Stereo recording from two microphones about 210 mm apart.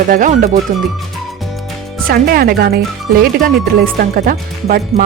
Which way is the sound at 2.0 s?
45° right (ahead or behind).